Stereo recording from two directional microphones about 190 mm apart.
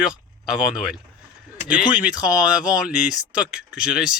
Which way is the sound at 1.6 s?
5° right (ahead or behind).